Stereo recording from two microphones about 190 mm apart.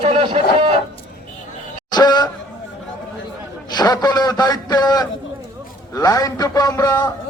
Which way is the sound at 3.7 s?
20° left (ahead or behind).